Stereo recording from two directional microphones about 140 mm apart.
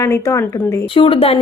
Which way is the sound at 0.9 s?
40° left (ahead or behind).